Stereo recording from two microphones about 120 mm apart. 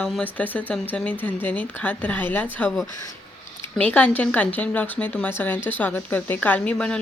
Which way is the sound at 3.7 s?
10° left (ahead or behind).